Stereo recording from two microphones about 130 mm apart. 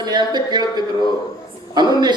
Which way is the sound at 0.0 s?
35° right (ahead or behind).